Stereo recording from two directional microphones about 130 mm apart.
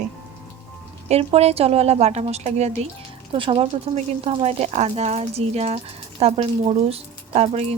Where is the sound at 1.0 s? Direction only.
55° right (ahead or behind).